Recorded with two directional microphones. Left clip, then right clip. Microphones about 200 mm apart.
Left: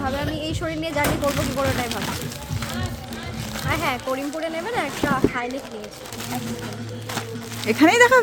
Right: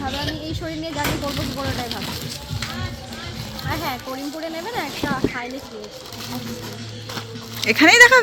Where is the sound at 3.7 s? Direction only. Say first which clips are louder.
Left 3 dB; 5° left (ahead or behind).